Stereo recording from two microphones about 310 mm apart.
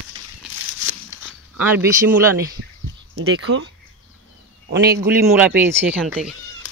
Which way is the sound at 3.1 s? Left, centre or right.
Right.